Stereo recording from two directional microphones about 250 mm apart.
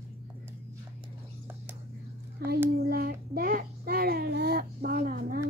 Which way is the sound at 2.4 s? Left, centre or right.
Right.